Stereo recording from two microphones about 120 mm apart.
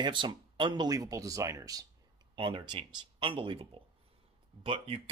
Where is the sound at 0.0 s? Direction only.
40° right (ahead or behind).